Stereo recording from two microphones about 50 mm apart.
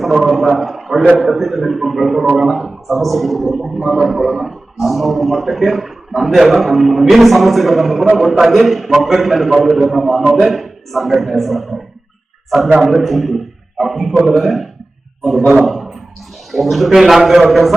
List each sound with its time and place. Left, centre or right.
0.0 s speech: centre
12.8 s speech: centre
15.6 s a sound: centre
16.5 s speech: centre